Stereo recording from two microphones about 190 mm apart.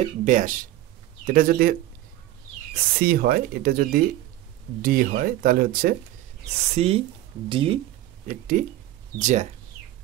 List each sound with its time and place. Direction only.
0.2 s speech: 45° right (ahead or behind)
6.7 s speech: 30° right (ahead or behind)
8.3 s speech: 45° right (ahead or behind)